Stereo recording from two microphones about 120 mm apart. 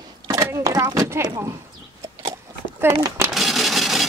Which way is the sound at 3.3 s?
Centre (ahead or behind).